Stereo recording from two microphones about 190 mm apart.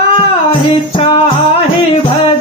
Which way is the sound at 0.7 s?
30° left (ahead or behind).